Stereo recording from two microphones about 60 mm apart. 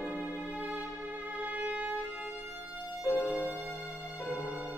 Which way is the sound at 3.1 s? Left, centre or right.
Left.